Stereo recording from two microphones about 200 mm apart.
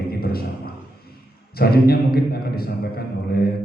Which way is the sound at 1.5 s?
50° left (ahead or behind).